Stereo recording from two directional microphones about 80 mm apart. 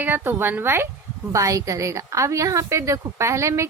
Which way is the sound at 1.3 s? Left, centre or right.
Right.